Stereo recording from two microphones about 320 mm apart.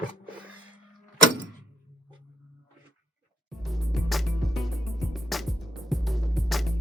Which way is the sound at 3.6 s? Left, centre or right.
Centre.